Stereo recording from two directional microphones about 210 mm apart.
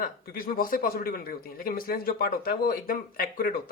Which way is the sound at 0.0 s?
45° left (ahead or behind).